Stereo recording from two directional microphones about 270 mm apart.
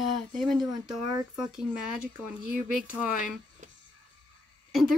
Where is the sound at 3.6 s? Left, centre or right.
Right.